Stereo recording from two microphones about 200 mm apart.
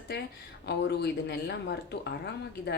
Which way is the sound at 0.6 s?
55° left (ahead or behind).